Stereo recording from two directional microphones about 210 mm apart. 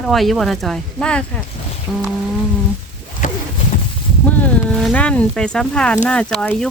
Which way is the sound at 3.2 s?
40° left (ahead or behind).